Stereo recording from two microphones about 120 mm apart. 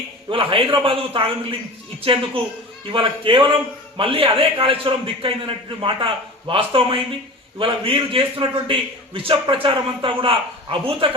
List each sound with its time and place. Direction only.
0.3 s a man's voice: 45° right (ahead or behind)